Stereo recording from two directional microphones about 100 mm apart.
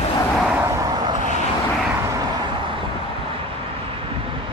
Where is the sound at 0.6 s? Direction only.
30° right (ahead or behind).